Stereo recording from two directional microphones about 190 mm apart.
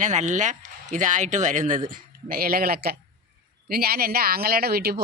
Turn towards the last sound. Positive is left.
turn(degrees=-55)  # may be behind; listen again after turning